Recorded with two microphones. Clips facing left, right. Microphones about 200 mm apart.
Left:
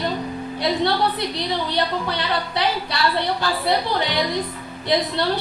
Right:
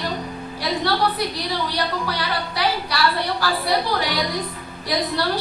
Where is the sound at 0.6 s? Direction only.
25° left (ahead or behind).